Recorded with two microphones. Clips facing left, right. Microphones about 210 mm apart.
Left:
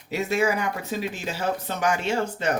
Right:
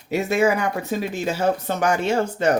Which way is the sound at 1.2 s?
45° right (ahead or behind).